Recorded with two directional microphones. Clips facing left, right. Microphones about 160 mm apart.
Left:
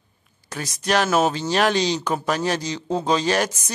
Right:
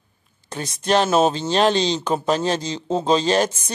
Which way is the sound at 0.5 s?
25° right (ahead or behind).